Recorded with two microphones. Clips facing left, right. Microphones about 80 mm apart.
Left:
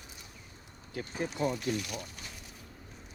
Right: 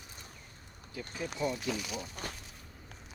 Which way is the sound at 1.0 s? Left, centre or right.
Left.